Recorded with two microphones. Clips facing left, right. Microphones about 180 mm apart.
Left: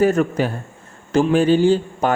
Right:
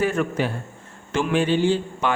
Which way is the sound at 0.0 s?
40° left (ahead or behind).